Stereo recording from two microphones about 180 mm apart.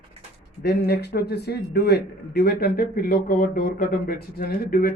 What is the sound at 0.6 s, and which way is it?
A man's voice, 60° left (ahead or behind).